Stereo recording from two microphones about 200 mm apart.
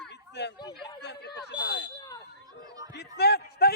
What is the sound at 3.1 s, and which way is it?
Speech, 55° left (ahead or behind).